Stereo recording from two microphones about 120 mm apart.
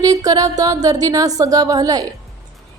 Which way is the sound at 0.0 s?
30° right (ahead or behind).